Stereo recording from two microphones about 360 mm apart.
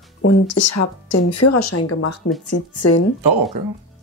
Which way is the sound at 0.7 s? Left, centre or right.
Left.